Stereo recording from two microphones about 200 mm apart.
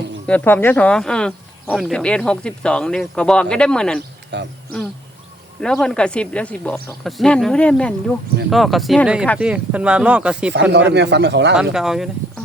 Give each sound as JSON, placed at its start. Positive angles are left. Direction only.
{"t": 0.3, "sound": "speech", "side_deg": 10}
{"t": 4.3, "sound": "speech", "side_deg": -60}
{"t": 5.8, "sound": "speech", "side_deg": 5}
{"t": 10.5, "sound": "speech", "side_deg": -60}
{"t": 11.5, "sound": "speech", "side_deg": -5}